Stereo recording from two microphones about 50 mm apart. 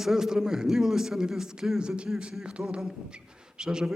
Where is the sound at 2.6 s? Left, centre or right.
Centre.